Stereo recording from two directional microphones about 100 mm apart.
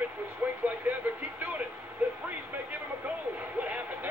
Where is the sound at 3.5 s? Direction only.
15° right (ahead or behind).